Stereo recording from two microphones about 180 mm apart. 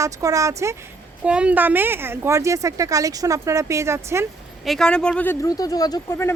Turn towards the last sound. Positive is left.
turn(degrees=15)  # may be behind; listen again after turning